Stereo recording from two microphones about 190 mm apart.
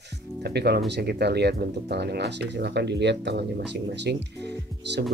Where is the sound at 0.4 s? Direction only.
60° right (ahead or behind).